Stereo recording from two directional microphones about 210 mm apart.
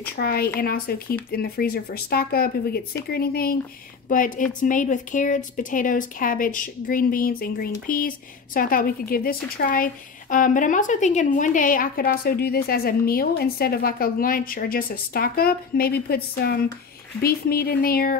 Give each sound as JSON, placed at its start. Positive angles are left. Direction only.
{"t": 0.1, "sound": "a woman's voice", "side_deg": 45}